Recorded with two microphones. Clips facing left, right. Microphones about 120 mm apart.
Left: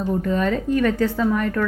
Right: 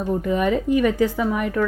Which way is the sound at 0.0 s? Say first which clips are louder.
Even; 15° right (ahead or behind).